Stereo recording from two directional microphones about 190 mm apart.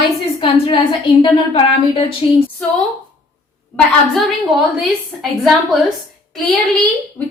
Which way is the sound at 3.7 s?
Centre (ahead or behind).